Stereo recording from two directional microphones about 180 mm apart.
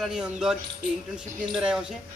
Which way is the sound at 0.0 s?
5° right (ahead or behind).